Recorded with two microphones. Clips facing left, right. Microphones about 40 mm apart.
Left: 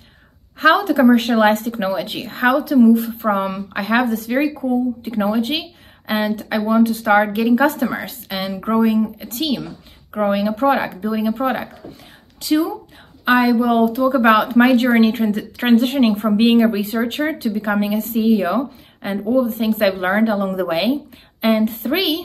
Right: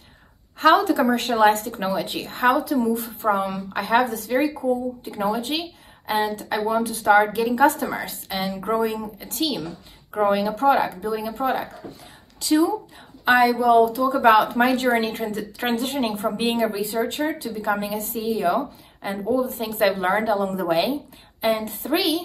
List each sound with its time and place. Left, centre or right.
0.7 s a woman's voice: left